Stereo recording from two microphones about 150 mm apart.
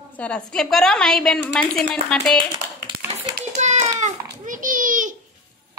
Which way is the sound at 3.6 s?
50° right (ahead or behind).